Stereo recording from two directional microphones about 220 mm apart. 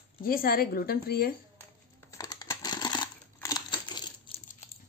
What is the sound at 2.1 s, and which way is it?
Scissors, 15° left (ahead or behind).